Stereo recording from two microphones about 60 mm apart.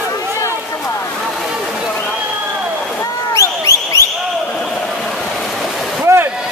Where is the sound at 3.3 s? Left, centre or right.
Left.